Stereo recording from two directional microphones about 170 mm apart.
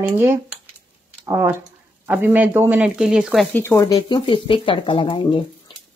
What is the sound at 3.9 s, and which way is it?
A woman's voice, 25° left (ahead or behind).